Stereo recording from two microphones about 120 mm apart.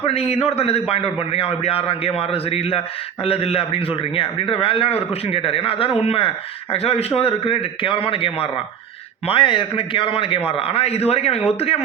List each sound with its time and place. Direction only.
0.0 s a man's voice: 55° left (ahead or behind)